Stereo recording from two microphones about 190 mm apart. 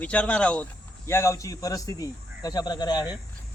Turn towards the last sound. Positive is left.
turn(degrees=20)  # may be behind; listen again after turning